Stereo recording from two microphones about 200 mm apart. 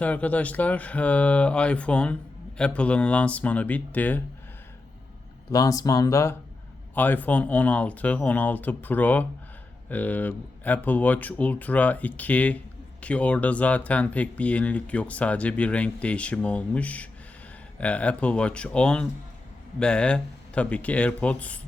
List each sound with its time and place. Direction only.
0.0 s speech: 5° left (ahead or behind)
5.5 s speech: 15° left (ahead or behind)